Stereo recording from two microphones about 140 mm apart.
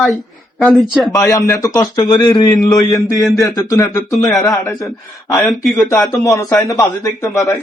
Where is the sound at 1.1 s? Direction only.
20° left (ahead or behind).